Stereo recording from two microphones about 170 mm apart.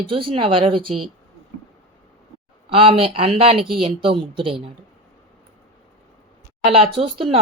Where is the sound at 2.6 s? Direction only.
35° right (ahead or behind).